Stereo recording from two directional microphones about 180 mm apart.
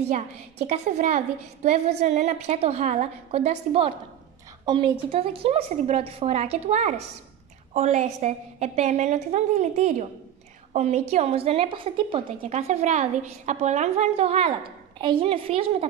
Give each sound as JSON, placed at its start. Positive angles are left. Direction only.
{"t": 0.0, "sound": "a woman's voice", "side_deg": -35}